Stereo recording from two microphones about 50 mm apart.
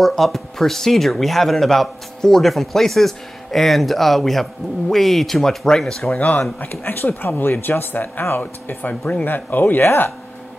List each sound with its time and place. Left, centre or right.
0.0 s speech: centre
6.1 s speech: left
6.8 s speech: left